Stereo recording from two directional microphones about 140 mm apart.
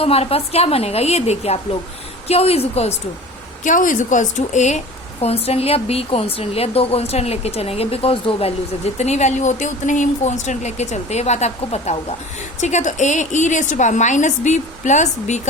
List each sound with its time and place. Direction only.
0.0 s a woman's voice: 45° left (ahead or behind)
3.6 s a woman's voice: 70° left (ahead or behind)